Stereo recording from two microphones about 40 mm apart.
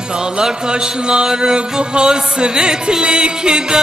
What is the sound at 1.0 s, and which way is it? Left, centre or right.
Music, right.